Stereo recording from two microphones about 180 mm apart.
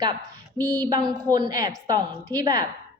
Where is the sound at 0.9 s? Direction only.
20° right (ahead or behind).